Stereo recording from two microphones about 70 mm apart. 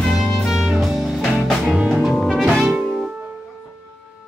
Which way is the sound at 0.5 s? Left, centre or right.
Centre.